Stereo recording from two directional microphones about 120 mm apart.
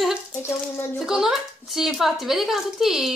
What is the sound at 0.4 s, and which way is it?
Speech, 20° left (ahead or behind).